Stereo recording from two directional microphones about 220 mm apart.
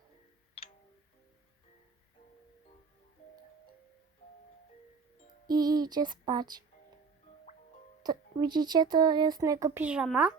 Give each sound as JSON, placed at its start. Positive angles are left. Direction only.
{"t": 5.5, "sound": "speech", "side_deg": -15}
{"t": 8.0, "sound": "speech", "side_deg": -20}